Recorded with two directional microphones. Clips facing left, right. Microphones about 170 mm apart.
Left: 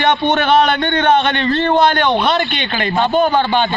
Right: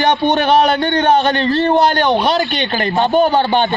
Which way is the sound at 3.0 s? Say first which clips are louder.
Right 1 dB; 15° right (ahead or behind).